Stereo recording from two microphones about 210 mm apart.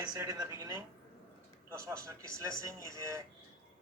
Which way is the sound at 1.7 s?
15° right (ahead or behind).